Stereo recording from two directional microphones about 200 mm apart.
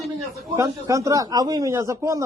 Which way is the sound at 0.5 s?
15° right (ahead or behind).